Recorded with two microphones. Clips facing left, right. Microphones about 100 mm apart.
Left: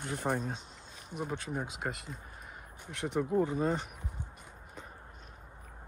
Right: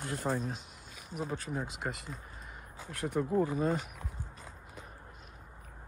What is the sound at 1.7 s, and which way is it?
Speech, centre (ahead or behind).